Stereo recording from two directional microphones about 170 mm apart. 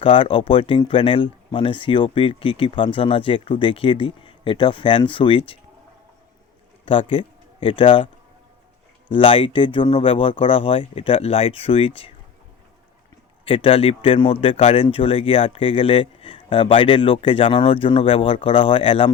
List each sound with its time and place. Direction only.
0.0 s a man's voice: 30° left (ahead or behind)
7.1 s a man's voice: 30° left (ahead or behind)
13.4 s a man's voice: 30° left (ahead or behind)